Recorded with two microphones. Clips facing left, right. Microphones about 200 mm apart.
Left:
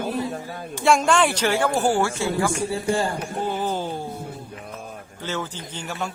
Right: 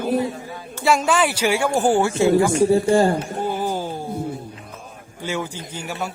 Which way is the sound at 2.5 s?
40° right (ahead or behind).